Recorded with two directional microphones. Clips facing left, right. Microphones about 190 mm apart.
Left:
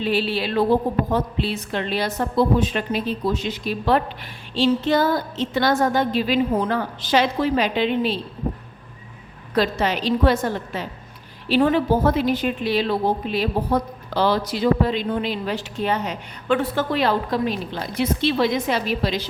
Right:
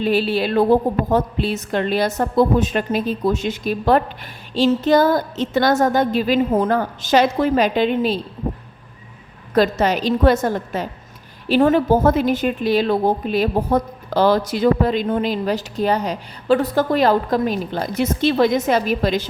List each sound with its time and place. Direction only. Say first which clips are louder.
0.0 s a woman's voice: right 4 dB; 45° right (ahead or behind)
9.6 s a woman's voice: right 4 dB; 45° right (ahead or behind)